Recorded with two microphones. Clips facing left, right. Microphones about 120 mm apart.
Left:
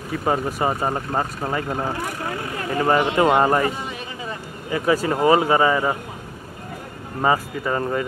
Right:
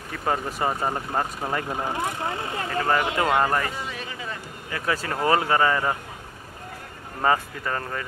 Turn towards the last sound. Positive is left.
turn(degrees=15)  # may be behind; listen again after turning